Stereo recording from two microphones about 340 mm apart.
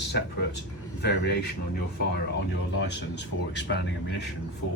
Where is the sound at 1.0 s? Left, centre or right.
Left.